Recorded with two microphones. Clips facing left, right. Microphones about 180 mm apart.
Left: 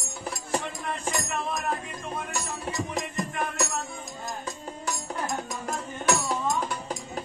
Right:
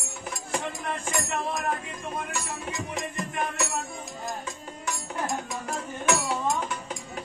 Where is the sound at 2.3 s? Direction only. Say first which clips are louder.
Left 1 dB; 40° left (ahead or behind).